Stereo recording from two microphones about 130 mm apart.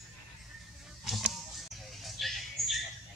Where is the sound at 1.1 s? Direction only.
Centre (ahead or behind).